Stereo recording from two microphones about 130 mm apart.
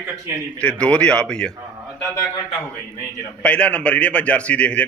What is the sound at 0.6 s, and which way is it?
Speech, 10° left (ahead or behind).